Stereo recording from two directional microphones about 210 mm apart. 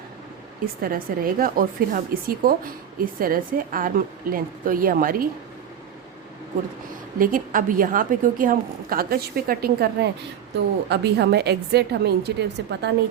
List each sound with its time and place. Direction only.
0.6 s a woman's voice: 45° right (ahead or behind)
7.2 s a woman's voice: 40° right (ahead or behind)